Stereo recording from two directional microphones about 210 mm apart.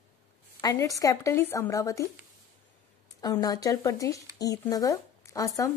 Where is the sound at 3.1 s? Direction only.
15° left (ahead or behind).